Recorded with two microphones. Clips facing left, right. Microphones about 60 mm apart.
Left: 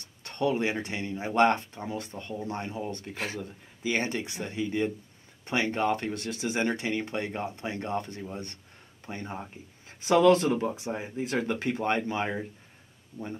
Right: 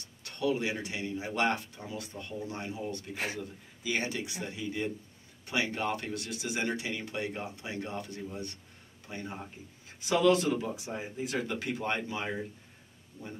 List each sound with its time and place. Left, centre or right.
0.2 s speech: left